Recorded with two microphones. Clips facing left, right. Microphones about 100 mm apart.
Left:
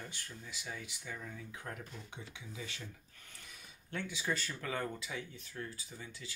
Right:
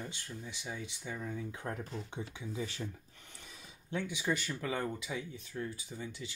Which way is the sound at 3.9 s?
15° right (ahead or behind).